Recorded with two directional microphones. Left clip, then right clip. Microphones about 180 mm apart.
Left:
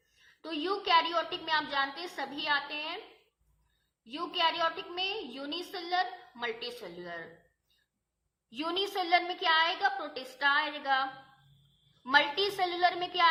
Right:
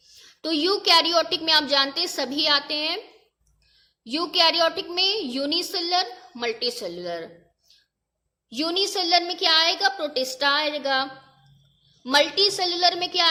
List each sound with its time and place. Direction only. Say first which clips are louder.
0.4 s a woman's voice: right 11 dB; 45° right (ahead or behind)
4.0 s a woman's voice: right 10 dB; 50° right (ahead or behind)
8.4 s a woman's voice: right 9 dB; 40° right (ahead or behind)